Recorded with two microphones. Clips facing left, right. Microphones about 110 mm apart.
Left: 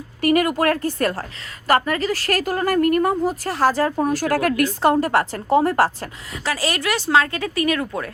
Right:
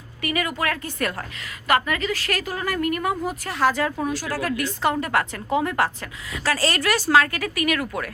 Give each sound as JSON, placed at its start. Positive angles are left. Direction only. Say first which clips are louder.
{"t": 0.2, "sound": "a woman's voice", "louder": "left 8 dB", "side_deg": 45}
{"t": 4.8, "sound": "a woman's voice", "louder": "left 4 dB", "side_deg": 35}
{"t": 6.4, "sound": "speech", "louder": "even", "side_deg": 15}